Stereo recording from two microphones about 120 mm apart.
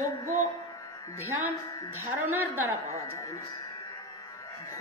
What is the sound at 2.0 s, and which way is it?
Speech, 15° right (ahead or behind).